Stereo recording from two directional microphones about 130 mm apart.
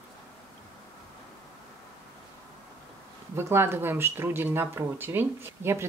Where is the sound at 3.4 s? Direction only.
20° right (ahead or behind).